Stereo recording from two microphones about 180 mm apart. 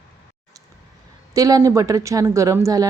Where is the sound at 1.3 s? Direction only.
20° right (ahead or behind).